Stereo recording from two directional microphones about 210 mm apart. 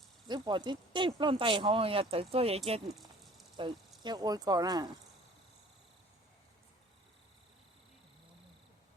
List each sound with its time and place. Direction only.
0.3 s speech: 20° right (ahead or behind)
2.9 s a sound: centre (ahead or behind)
3.6 s speech: 20° right (ahead or behind)